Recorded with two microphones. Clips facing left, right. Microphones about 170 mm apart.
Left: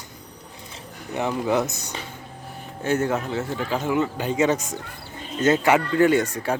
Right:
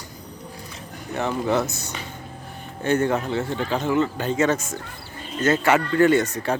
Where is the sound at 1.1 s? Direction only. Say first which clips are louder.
Even; 15° left (ahead or behind).